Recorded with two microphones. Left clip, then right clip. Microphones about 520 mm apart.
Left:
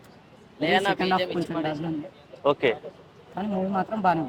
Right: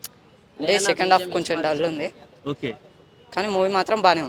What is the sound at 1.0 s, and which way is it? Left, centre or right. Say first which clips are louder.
Speech: right 6 dB; right.